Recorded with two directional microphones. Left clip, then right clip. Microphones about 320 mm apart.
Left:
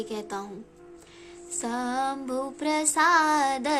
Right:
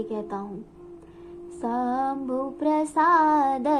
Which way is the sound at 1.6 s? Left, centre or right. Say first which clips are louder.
Right 3 dB; left.